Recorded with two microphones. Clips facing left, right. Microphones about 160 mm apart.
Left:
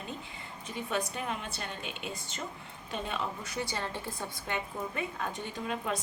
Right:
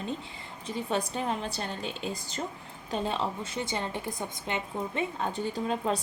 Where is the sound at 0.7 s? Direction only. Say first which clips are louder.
Right 4 dB; 30° right (ahead or behind).